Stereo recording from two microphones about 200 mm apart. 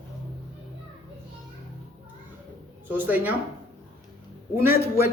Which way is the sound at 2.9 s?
10° right (ahead or behind).